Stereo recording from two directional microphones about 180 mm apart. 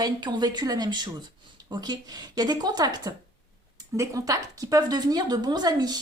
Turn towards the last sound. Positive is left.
turn(degrees=-20)  # may be behind; listen again after turning